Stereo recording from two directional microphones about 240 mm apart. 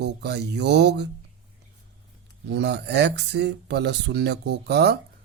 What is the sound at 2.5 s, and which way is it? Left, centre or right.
Speech, right.